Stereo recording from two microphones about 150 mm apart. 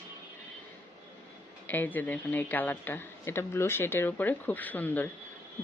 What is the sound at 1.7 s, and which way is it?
Speech, 10° left (ahead or behind).